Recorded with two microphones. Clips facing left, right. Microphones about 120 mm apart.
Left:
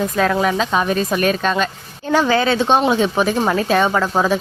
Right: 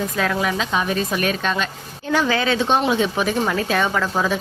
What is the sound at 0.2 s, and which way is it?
A woman's voice, 40° left (ahead or behind).